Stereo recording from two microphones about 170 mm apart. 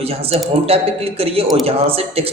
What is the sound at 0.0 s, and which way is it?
A woman's voice, 35° right (ahead or behind).